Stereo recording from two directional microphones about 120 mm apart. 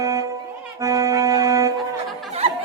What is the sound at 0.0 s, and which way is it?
Music, 30° right (ahead or behind).